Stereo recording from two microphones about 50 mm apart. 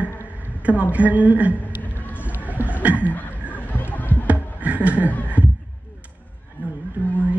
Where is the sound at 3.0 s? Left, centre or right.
Left.